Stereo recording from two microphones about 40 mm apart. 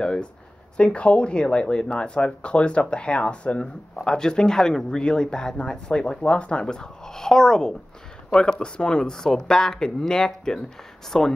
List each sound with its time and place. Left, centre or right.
0.7 s speech: left
3.9 s speech: centre
9.1 s speech: centre